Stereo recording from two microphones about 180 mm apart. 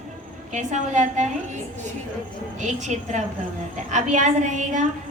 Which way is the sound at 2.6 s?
40° right (ahead or behind).